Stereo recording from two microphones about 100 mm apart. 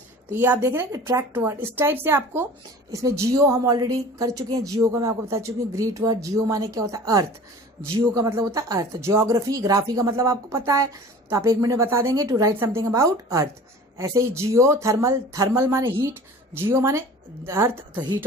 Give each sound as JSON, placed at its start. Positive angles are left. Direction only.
{"t": 0.3, "sound": "a woman's voice", "side_deg": -25}
{"t": 2.9, "sound": "a woman's voice", "side_deg": -30}
{"t": 8.3, "sound": "a woman's voice", "side_deg": -30}